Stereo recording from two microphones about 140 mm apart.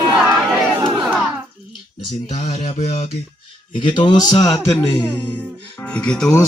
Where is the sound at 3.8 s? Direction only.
30° left (ahead or behind).